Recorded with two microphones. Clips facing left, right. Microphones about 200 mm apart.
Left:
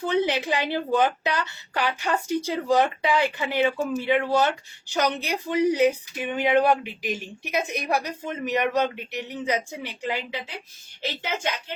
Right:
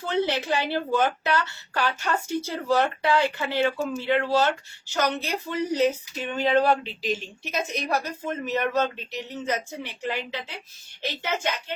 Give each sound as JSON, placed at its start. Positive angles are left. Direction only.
{"t": 0.0, "sound": "speech", "side_deg": 15}